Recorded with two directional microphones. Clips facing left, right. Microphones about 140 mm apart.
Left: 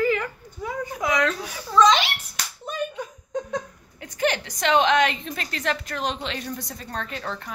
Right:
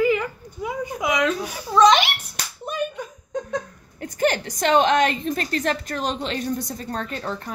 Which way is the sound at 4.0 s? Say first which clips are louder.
Right 3 dB; 45° right (ahead or behind).